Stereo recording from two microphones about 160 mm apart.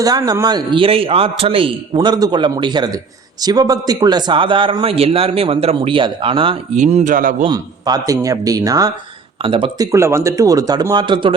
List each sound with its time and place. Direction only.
0.0 s a man's voice: 25° right (ahead or behind)
6.7 s a man's voice: 50° right (ahead or behind)
7.5 s a man's voice: 25° right (ahead or behind)
9.4 s a man's voice: 35° right (ahead or behind)